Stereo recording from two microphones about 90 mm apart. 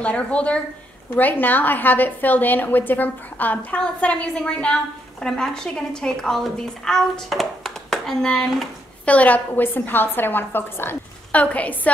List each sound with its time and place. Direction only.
0.0 s a woman's voice: 15° left (ahead or behind)